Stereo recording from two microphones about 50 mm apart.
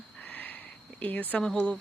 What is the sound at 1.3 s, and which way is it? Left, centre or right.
Speech, centre.